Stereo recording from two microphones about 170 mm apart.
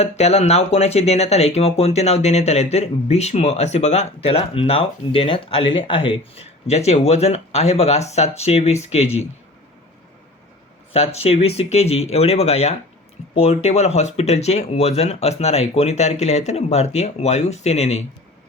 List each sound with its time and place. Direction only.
0.0 s speech: 40° left (ahead or behind)
10.9 s speech: 35° left (ahead or behind)